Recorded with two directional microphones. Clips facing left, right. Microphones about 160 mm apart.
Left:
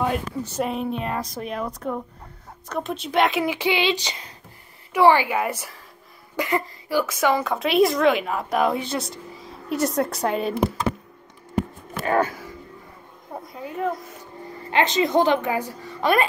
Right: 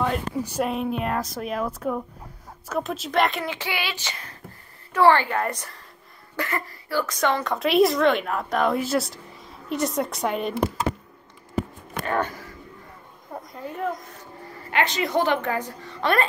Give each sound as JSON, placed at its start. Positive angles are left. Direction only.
{"t": 0.4, "sound": "a woman's voice", "side_deg": -10}
{"t": 0.7, "sound": "speech", "side_deg": 0}
{"t": 3.5, "sound": "a woman's voice", "side_deg": 20}
{"t": 12.0, "sound": "speech", "side_deg": 5}
{"t": 14.7, "sound": "a woman's voice", "side_deg": 25}